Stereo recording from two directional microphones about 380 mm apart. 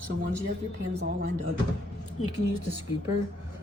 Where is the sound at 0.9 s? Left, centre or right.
Right.